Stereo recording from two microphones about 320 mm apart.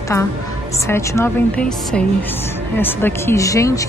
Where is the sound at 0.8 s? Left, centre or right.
Centre.